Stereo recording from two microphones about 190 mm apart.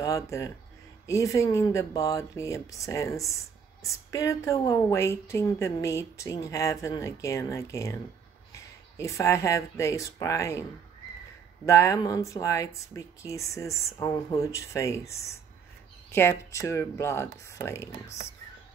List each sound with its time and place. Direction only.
0.0 s a woman's voice: 15° left (ahead or behind)
11.6 s a woman's voice: 15° left (ahead or behind)